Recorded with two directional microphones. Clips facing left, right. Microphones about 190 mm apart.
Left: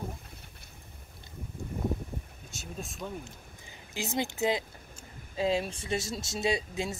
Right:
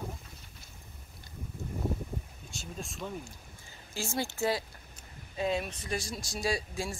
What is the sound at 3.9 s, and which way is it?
Speech, 20° left (ahead or behind).